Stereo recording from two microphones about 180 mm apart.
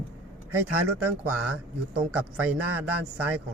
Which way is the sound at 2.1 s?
10° right (ahead or behind).